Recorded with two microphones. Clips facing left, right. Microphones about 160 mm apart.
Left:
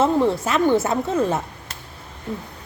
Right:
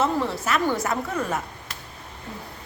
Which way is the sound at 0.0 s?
30° left (ahead or behind).